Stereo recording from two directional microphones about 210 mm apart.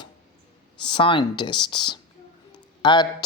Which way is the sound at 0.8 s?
20° left (ahead or behind).